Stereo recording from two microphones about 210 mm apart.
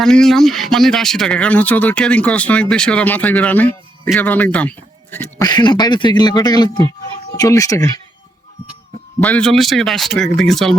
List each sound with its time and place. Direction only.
0.0 s speech: centre (ahead or behind)
5.1 s speech: 20° left (ahead or behind)
9.2 s speech: 5° left (ahead or behind)